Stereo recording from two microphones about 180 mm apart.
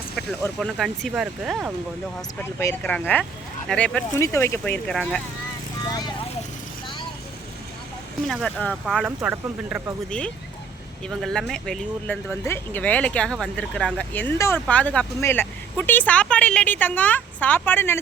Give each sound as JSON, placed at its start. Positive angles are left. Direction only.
{"t": 0.6, "sound": "speech", "side_deg": 0}
{"t": 2.4, "sound": "speech", "side_deg": 15}
{"t": 4.2, "sound": "speech", "side_deg": 15}
{"t": 8.3, "sound": "speech", "side_deg": 5}
{"t": 10.1, "sound": "speech", "side_deg": 5}
{"t": 14.1, "sound": "speech", "side_deg": 10}